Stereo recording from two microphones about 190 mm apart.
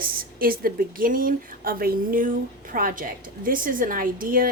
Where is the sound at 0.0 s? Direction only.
50° right (ahead or behind).